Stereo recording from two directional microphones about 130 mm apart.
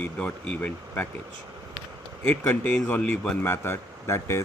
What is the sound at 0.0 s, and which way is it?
Speech, 10° left (ahead or behind).